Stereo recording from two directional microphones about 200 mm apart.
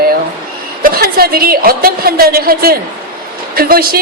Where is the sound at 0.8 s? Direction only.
50° right (ahead or behind).